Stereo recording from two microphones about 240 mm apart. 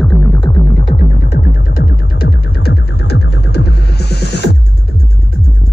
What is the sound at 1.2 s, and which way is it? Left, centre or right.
Music, left.